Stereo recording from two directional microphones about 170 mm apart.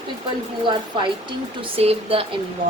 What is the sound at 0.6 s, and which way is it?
A woman's voice, 30° right (ahead or behind).